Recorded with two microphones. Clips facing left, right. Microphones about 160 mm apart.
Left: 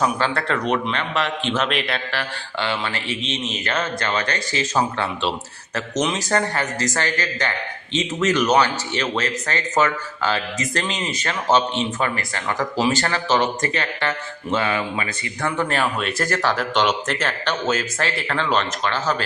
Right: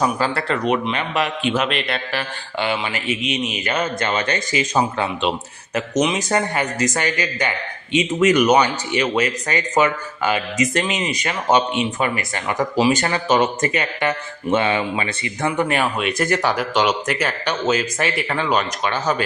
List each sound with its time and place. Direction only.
0.0 s speech: 5° right (ahead or behind)
2.1 s speech: 15° right (ahead or behind)